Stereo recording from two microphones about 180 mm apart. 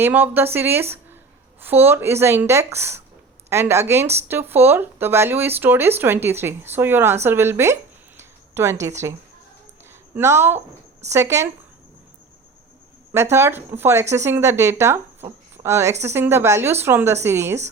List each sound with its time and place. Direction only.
0.0 s speech: 10° right (ahead or behind)
7.3 s a sound: 15° right (ahead or behind)
10.2 s speech: 15° right (ahead or behind)
13.3 s speech: 15° right (ahead or behind)